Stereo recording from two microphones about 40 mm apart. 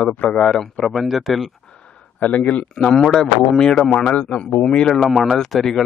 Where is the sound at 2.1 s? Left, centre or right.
Left.